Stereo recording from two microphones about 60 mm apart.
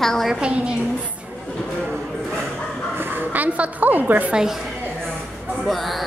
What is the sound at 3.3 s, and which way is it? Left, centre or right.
Speech, right.